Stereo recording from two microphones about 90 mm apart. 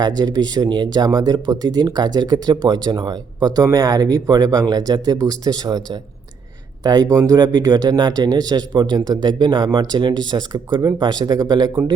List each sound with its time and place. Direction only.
0.2 s speech: 50° right (ahead or behind)